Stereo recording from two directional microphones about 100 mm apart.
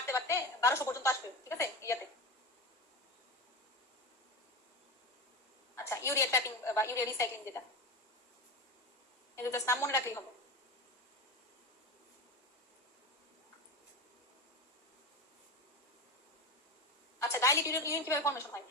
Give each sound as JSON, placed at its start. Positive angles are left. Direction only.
{"t": 0.0, "sound": "a woman's voice", "side_deg": 30}
{"t": 5.7, "sound": "a woman's voice", "side_deg": 30}
{"t": 9.3, "sound": "a woman's voice", "side_deg": 30}
{"t": 17.3, "sound": "a woman's voice", "side_deg": 30}